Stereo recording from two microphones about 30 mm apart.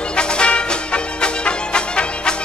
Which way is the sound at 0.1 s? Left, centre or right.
Left.